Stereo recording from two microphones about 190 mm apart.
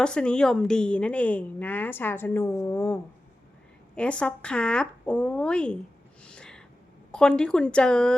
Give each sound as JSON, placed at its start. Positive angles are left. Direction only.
{"t": 0.0, "sound": "speech", "side_deg": 5}
{"t": 6.2, "sound": "a sound", "side_deg": 5}
{"t": 7.1, "sound": "speech", "side_deg": 5}